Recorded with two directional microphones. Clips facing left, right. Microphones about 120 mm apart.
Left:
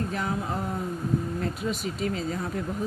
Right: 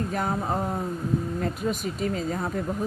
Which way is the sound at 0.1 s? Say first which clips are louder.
Right 3 dB; 40° right (ahead or behind).